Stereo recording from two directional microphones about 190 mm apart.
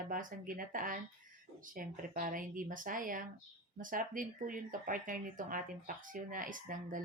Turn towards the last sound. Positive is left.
turn(degrees=-45)  # may be behind; listen again after turning